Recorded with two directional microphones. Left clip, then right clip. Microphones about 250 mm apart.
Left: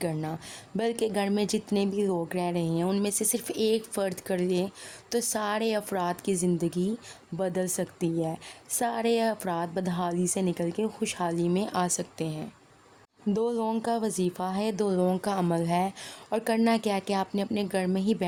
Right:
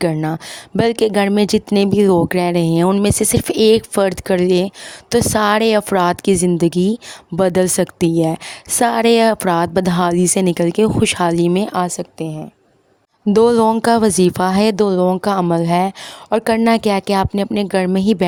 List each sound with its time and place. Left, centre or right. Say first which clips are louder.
0.0 s speech: right 14 dB; right